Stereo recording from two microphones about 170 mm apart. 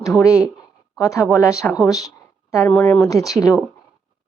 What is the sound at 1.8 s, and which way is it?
Speech, centre (ahead or behind).